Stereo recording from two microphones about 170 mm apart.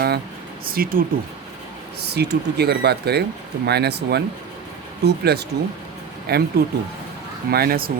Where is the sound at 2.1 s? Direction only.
75° right (ahead or behind).